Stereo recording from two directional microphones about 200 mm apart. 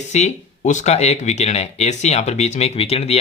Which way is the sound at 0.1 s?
35° left (ahead or behind).